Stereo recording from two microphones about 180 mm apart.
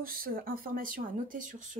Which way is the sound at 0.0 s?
55° right (ahead or behind).